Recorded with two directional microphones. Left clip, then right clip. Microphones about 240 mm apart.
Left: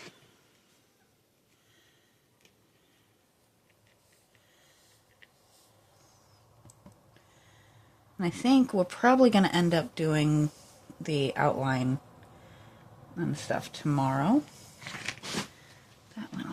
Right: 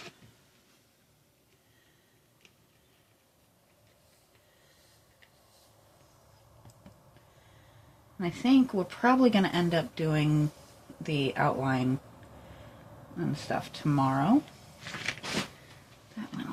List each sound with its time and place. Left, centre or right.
8.2 s speech: left
13.1 s speech: left
16.2 s a sound: left